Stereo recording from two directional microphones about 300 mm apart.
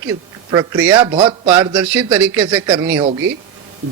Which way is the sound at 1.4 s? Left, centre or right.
Centre.